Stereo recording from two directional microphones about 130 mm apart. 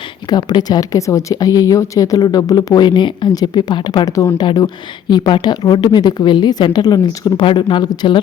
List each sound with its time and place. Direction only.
0.3 s speech: 30° left (ahead or behind)